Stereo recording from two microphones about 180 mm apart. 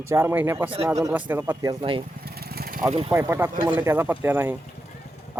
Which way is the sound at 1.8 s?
30° right (ahead or behind).